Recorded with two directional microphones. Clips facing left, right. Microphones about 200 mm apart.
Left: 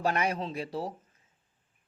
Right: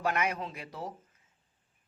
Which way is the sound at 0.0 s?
30° left (ahead or behind).